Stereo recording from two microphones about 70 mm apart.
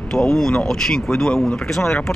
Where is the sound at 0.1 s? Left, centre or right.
Centre.